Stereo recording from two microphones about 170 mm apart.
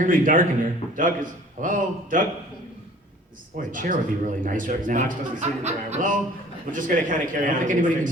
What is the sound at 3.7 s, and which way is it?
Speech, 50° right (ahead or behind).